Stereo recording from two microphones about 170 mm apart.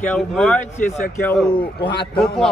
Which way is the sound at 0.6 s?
45° left (ahead or behind).